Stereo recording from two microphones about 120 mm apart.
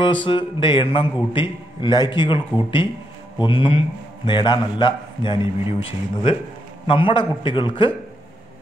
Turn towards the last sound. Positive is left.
turn(degrees=45)  # may be behind; listen again after turning